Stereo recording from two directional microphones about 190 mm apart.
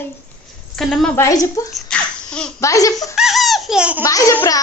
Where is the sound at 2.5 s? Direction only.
15° left (ahead or behind).